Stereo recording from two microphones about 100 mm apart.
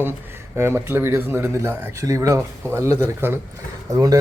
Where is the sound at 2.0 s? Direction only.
35° right (ahead or behind).